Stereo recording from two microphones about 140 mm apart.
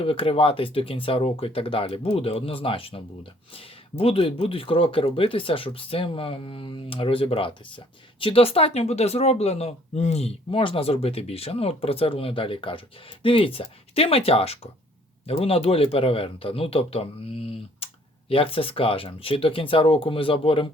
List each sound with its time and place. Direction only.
0.0 s speech: 40° left (ahead or behind)